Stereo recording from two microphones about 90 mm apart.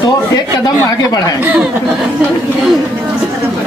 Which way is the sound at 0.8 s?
45° left (ahead or behind).